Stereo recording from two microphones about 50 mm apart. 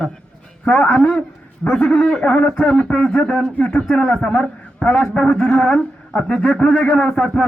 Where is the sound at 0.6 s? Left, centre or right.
Left.